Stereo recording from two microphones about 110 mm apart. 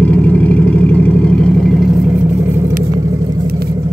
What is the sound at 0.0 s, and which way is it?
Vehicle, 10° left (ahead or behind).